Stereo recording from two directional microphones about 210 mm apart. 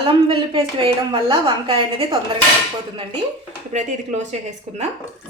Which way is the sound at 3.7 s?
35° right (ahead or behind).